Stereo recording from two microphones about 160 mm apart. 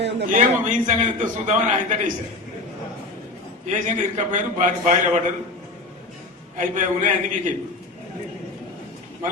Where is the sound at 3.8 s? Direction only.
50° right (ahead or behind).